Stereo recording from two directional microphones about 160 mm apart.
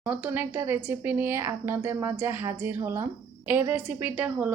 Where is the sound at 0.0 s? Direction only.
10° right (ahead or behind).